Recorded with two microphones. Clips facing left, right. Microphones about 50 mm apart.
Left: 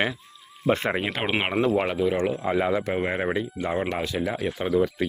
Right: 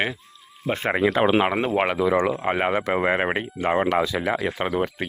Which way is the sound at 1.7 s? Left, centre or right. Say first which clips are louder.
Right 3 dB; right.